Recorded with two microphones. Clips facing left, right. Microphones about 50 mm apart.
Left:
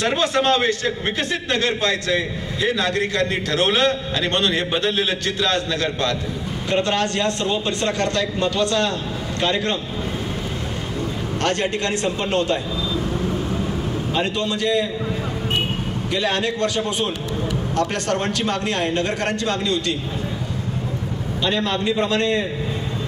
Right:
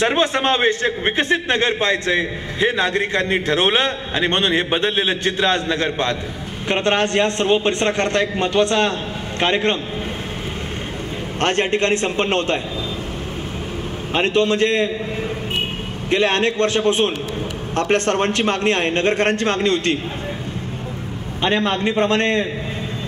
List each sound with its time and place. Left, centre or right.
0.0 s a man's voice: right
11.4 s a man's voice: right
14.1 s a man's voice: right
16.1 s a man's voice: right
21.4 s a man's voice: right